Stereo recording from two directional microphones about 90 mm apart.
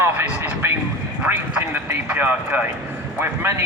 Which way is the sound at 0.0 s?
25° right (ahead or behind).